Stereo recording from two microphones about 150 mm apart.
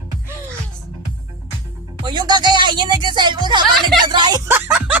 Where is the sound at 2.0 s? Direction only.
30° right (ahead or behind); by 4.9 s 10° right (ahead or behind).